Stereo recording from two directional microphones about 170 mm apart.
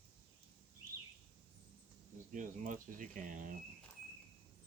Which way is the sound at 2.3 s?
50° right (ahead or behind).